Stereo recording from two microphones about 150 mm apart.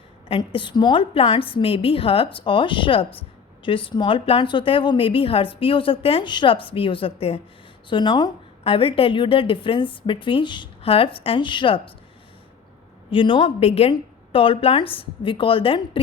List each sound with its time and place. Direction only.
0.3 s a woman's voice: 35° left (ahead or behind)
13.1 s a woman's voice: 35° left (ahead or behind)